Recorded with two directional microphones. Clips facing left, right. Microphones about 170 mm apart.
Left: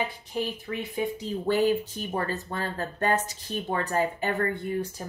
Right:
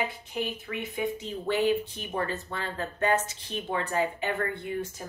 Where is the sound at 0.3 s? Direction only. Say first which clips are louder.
Left 2 dB; 35° left (ahead or behind).